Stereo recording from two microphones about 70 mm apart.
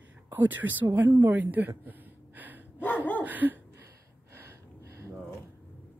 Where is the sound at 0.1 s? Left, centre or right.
Right.